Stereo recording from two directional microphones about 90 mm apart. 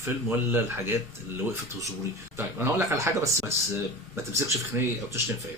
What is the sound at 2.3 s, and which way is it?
Speech, 30° right (ahead or behind).